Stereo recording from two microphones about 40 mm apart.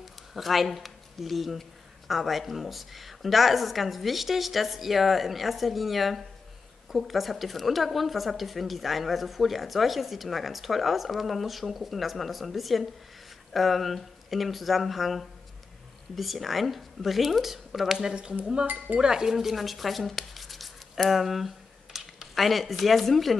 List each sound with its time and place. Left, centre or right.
0.0 s speech: centre
18.4 s speech: right
19.3 s speech: centre